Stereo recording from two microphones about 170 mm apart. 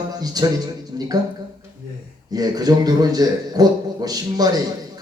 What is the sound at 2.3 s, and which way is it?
A man's voice, 20° right (ahead or behind).